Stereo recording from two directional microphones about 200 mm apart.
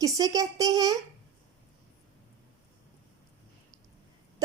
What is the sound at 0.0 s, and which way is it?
Speech, 15° right (ahead or behind).